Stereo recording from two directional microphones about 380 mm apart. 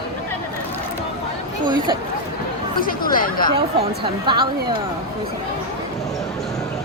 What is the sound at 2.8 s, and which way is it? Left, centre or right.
Chatter, left.